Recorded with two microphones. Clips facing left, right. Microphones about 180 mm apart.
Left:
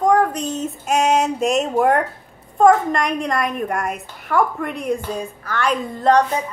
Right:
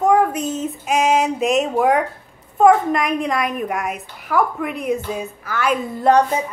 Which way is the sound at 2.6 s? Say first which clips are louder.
Even; 5° right (ahead or behind).